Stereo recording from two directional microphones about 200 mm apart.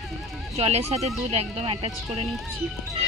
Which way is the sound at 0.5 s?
30° right (ahead or behind).